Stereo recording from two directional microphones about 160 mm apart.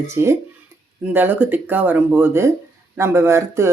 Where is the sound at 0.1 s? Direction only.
15° right (ahead or behind).